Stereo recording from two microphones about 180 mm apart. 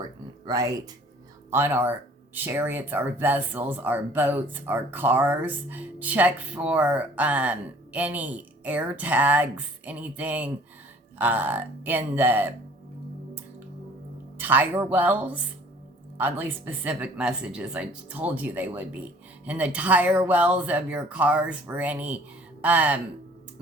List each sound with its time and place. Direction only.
0.4 s speech: 20° right (ahead or behind)
14.3 s speech: 10° right (ahead or behind)